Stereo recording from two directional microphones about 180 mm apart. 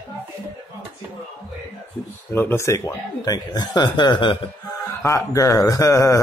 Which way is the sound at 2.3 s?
10° left (ahead or behind).